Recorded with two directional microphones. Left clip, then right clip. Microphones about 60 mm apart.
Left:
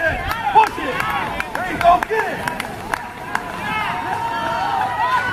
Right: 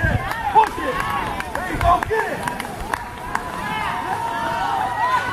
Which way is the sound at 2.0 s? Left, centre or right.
Centre.